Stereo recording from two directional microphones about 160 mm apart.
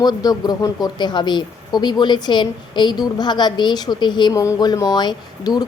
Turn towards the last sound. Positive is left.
turn(degrees=25)  # may be behind; listen again after turning